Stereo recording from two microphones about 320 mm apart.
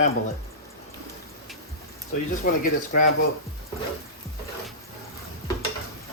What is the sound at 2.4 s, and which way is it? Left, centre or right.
Speech, left.